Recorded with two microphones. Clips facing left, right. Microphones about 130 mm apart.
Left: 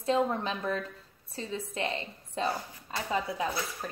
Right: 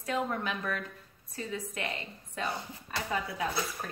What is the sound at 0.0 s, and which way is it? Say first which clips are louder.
A woman's voice: left 5 dB; 25° left (ahead or behind).